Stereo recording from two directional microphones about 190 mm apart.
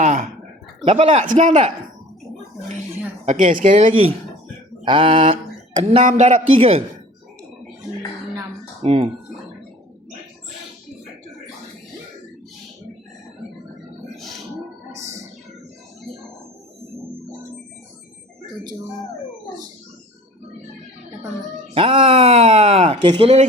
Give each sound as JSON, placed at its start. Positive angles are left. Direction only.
{"t": 0.0, "sound": "a sound", "side_deg": -40}
{"t": 0.9, "sound": "speech", "side_deg": -30}
{"t": 3.2, "sound": "speech", "side_deg": -40}
{"t": 4.9, "sound": "mantra", "side_deg": -25}
{"t": 6.1, "sound": "speech", "side_deg": -40}
{"t": 8.8, "sound": "speech", "side_deg": -30}
{"t": 14.9, "sound": "music", "side_deg": -15}
{"t": 21.8, "sound": "speech", "side_deg": -30}